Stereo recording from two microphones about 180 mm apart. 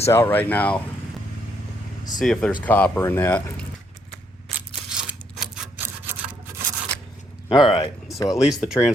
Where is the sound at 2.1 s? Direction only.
5° left (ahead or behind).